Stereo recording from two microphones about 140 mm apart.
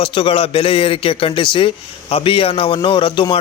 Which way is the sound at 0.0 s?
40° left (ahead or behind).